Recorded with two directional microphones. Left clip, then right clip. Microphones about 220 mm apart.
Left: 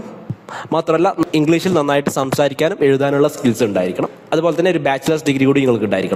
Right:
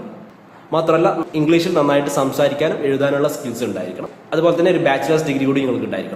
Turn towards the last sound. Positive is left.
turn(degrees=45)  # may be behind; listen again after turning